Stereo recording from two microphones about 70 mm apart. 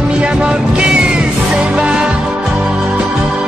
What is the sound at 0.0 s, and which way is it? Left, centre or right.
Music, centre.